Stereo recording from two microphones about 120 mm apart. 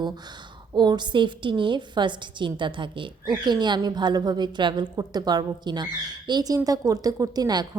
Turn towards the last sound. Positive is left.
turn(degrees=-35)  # may be behind; listen again after turning